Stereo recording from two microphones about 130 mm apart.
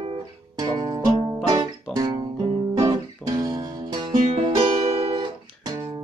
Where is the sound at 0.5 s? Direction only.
30° right (ahead or behind).